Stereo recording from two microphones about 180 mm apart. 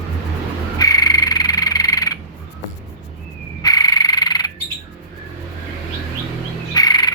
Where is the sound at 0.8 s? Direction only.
20° left (ahead or behind).